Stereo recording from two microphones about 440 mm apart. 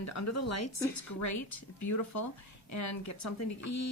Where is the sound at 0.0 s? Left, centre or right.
Left.